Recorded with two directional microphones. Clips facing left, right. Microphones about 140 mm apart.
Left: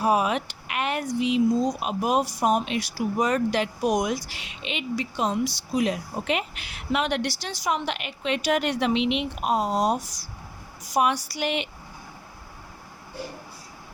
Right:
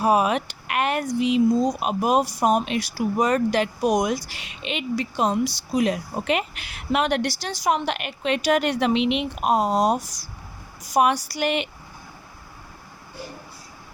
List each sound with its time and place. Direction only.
0.0 s speech: 55° right (ahead or behind)